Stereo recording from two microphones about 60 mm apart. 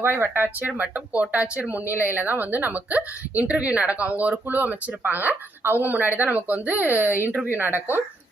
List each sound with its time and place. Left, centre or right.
0.0 s speech: right
0.8 s speech: right
1.7 s speech: right